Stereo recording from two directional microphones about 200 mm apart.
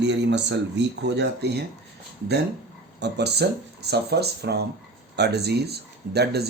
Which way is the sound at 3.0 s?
55° right (ahead or behind).